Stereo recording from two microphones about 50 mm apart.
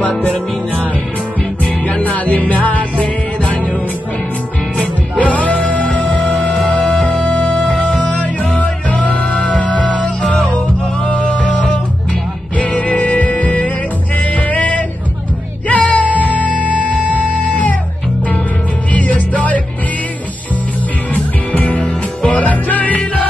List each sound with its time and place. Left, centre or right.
0.2 s music: left
4.7 s music: left
12.5 s music: left
18.9 s music: left
21.1 s music: left